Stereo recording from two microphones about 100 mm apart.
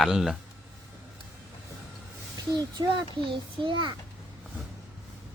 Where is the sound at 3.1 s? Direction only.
60° right (ahead or behind).